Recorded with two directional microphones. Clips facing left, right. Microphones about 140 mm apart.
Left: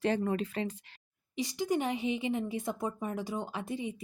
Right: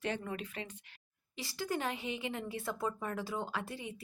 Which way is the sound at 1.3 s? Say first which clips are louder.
Left 6 dB; 20° left (ahead or behind).